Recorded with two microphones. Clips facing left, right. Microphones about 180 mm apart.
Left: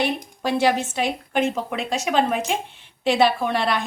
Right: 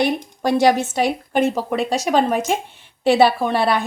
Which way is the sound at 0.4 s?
45° right (ahead or behind).